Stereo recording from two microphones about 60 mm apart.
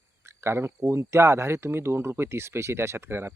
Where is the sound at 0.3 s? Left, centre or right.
Right.